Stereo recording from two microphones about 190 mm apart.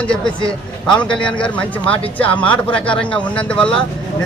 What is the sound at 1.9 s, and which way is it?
Speech, 5° left (ahead or behind).